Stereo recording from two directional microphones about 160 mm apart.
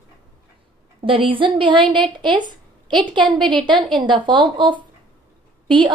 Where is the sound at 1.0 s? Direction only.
35° right (ahead or behind).